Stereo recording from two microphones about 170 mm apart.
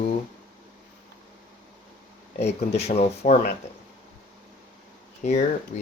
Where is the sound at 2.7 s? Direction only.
40° left (ahead or behind).